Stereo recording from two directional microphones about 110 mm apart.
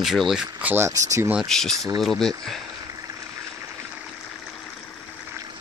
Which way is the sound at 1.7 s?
30° right (ahead or behind).